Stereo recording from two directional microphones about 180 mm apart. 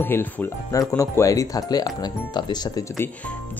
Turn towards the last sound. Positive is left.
turn(degrees=20)  # may be behind; listen again after turning